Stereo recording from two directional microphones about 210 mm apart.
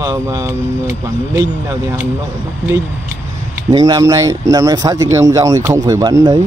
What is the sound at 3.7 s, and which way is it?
Speech, 20° right (ahead or behind).